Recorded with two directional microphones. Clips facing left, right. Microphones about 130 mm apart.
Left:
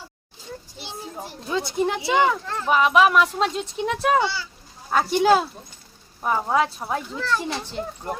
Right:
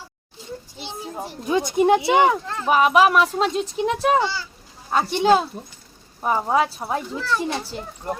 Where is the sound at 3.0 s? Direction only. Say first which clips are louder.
Right 1 dB; centre (ahead or behind).